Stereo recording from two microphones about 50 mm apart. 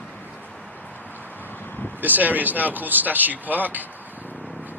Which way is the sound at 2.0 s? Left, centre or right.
Right.